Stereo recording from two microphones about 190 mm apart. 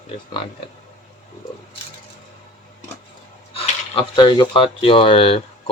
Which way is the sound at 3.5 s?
30° left (ahead or behind).